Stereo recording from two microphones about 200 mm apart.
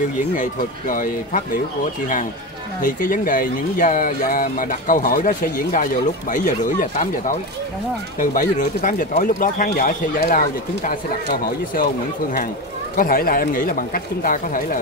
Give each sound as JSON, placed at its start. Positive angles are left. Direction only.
{"t": 0.4, "sound": "speech", "side_deg": 45}
{"t": 2.8, "sound": "speech", "side_deg": 45}
{"t": 12.9, "sound": "speech", "side_deg": 45}